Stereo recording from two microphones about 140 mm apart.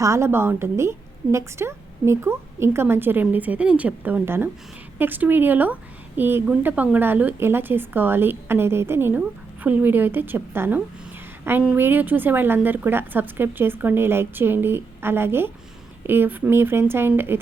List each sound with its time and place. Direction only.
0.0 s a woman's voice: 20° right (ahead or behind)